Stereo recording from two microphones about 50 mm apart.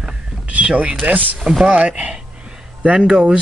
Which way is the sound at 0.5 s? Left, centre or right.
Right.